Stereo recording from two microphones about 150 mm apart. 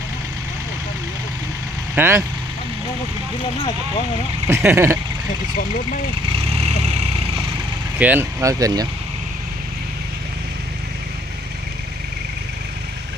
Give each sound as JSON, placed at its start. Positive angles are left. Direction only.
{"t": 2.0, "sound": "speech", "side_deg": -15}
{"t": 4.4, "sound": "speech", "side_deg": -15}
{"t": 6.6, "sound": "vehicle", "side_deg": -45}
{"t": 7.9, "sound": "speech", "side_deg": -10}